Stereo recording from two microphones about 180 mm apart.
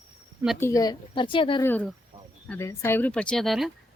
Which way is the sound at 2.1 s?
30° right (ahead or behind).